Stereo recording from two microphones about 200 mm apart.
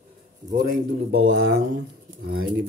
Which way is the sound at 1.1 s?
55° right (ahead or behind).